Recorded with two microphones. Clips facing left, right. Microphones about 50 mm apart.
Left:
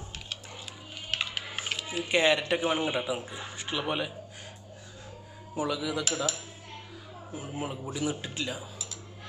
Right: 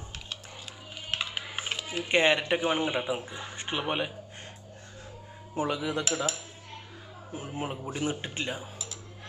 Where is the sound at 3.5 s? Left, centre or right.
Right.